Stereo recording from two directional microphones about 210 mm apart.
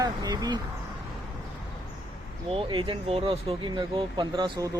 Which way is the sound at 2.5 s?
25° right (ahead or behind).